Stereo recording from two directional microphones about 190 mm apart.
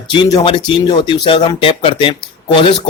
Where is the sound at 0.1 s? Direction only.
25° left (ahead or behind).